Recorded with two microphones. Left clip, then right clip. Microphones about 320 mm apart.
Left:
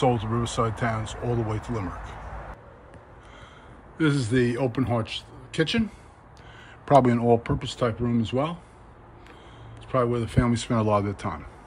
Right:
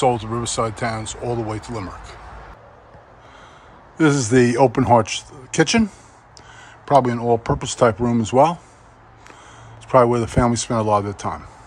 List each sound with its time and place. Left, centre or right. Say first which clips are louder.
0.0 s speech: right 5 dB; centre
4.0 s speech: right 8 dB; centre
6.9 s speech: right 3 dB; centre
7.5 s speech: right 10 dB; centre
9.8 s speech: right 10 dB; centre